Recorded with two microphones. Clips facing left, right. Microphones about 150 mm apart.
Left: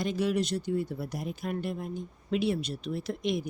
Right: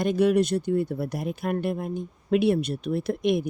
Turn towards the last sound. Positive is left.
turn(degrees=-60)  # may be behind; listen again after turning